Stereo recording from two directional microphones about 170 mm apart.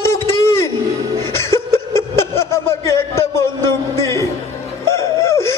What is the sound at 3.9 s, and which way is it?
Music, 15° left (ahead or behind).